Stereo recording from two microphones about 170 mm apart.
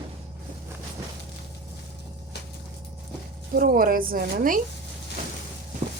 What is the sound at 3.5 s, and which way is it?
A woman's voice, 60° right (ahead or behind).